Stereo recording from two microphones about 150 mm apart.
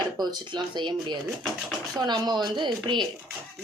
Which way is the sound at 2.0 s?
25° right (ahead or behind).